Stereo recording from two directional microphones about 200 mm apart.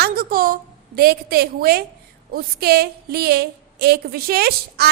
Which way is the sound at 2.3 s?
50° right (ahead or behind).